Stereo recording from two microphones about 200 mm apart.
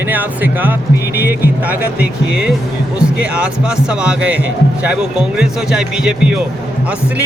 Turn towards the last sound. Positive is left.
turn(degrees=-5)  # may be behind; listen again after turning